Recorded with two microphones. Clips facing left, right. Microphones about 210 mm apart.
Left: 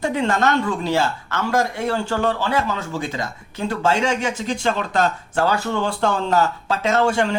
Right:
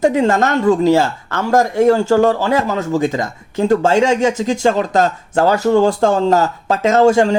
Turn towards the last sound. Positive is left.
turn(degrees=-40)  # may be behind; listen again after turning